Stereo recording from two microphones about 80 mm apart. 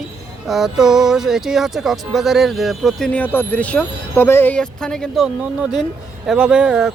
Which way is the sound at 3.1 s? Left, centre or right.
Left.